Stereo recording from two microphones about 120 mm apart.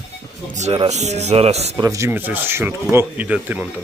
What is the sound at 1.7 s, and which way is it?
Speech, 30° right (ahead or behind).